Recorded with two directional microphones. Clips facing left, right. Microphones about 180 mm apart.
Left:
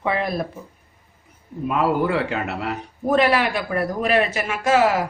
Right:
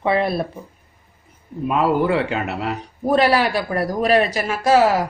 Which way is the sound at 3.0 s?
35° right (ahead or behind).